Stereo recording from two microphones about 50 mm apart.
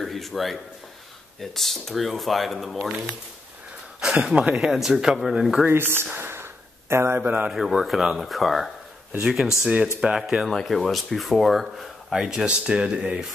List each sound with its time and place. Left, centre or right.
0.0 s a man's voice: centre
4.0 s speech: centre
5.7 s a sound: right
7.2 s speech: right
7.8 s speech: centre
9.2 s speech: centre
10.5 s speech: centre
12.1 s speech: centre